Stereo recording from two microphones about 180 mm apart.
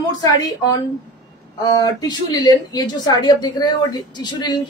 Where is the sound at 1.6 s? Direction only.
20° left (ahead or behind).